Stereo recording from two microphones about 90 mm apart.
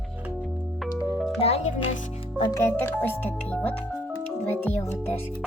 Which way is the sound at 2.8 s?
20° left (ahead or behind).